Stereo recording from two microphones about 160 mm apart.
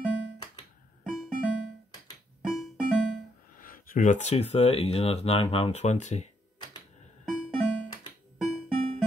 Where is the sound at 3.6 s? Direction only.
60° left (ahead or behind); by 6.3 s 45° left (ahead or behind).